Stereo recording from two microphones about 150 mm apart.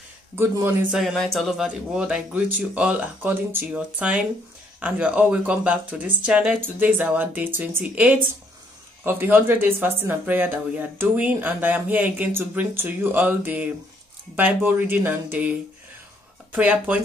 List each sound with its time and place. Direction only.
0.4 s speech: 15° right (ahead or behind)
0.9 s speech: centre (ahead or behind)
16.5 s speech: 10° right (ahead or behind)